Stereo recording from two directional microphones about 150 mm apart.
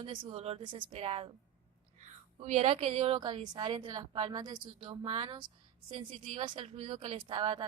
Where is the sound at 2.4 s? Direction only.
50° right (ahead or behind).